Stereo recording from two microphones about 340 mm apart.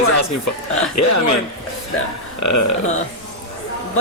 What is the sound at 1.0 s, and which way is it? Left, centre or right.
Speech, left.